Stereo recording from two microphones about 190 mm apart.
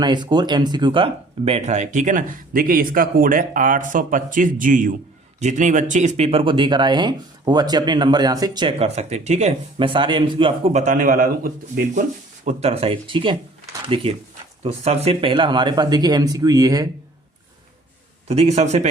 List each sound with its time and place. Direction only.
0.0 s speech: 25° right (ahead or behind); by 11.5 s 45° right (ahead or behind)
12.5 s speech: 35° right (ahead or behind); by 16.9 s 20° right (ahead or behind)
18.3 s speech: 35° right (ahead or behind)